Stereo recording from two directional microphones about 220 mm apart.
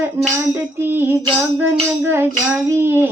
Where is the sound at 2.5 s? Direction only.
10° right (ahead or behind).